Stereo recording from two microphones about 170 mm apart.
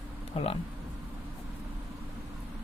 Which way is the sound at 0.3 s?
35° left (ahead or behind).